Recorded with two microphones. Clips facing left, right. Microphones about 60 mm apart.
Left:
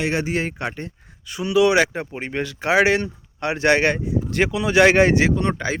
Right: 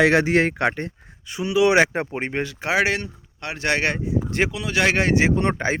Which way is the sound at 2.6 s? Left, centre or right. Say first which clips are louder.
Left 5 dB; centre.